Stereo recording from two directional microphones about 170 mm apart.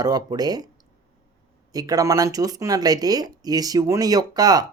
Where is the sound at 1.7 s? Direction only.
20° right (ahead or behind).